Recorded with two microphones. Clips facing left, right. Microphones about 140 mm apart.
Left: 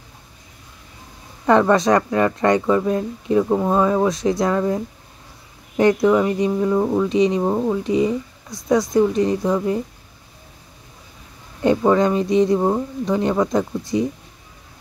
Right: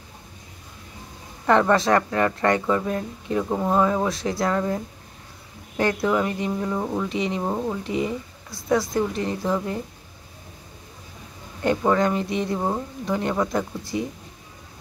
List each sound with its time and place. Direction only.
1.4 s speech: 15° left (ahead or behind)
11.6 s speech: 15° left (ahead or behind)